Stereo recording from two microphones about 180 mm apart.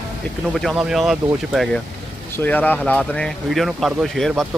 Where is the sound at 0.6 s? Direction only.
Centre (ahead or behind).